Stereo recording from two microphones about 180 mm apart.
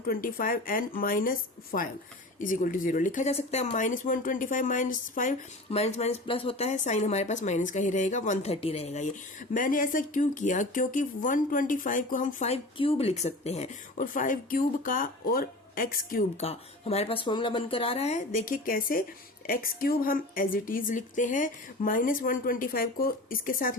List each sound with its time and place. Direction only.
0.0 s a woman's voice: 55° left (ahead or behind)
5.7 s speech: 35° left (ahead or behind)
9.5 s a woman's voice: 50° left (ahead or behind)
12.7 s a woman's voice: 30° left (ahead or behind); by 16.2 s 50° left (ahead or behind)
16.4 s a woman's voice: 35° left (ahead or behind); by 23.7 s 50° left (ahead or behind)